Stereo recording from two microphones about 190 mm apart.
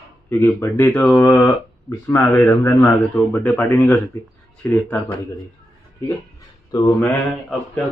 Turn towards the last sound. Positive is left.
turn(degrees=5)  # may be behind; listen again after turning